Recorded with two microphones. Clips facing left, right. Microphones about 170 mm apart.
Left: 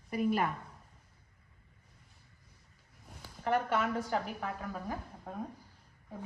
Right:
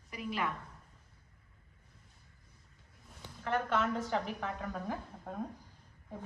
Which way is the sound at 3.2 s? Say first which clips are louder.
Left 3 dB; 5° left (ahead or behind).